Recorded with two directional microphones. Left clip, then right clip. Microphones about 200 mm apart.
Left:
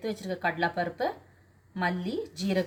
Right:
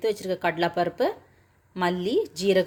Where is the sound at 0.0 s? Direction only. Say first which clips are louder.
Right 6 dB; 45° right (ahead or behind).